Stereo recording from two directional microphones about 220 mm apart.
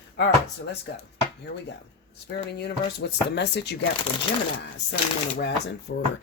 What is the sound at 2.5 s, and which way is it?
Speech, 50° left (ahead or behind).